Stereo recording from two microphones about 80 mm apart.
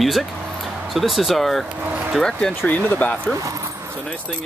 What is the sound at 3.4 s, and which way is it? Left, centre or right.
Speech, right.